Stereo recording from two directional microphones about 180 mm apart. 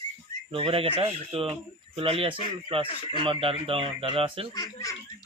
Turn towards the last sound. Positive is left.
turn(degrees=20)  # may be behind; listen again after turning